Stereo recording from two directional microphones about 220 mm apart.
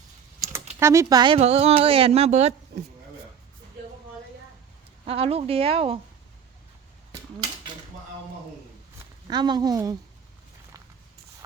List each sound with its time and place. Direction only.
0.8 s speech: 15° right (ahead or behind); by 2.6 s 30° right (ahead or behind)
5.0 s speech: 25° right (ahead or behind)
9.2 s speech: 20° right (ahead or behind)